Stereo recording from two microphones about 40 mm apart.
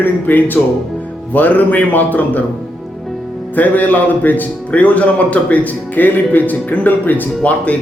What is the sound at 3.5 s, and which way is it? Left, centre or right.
A man's voice, left.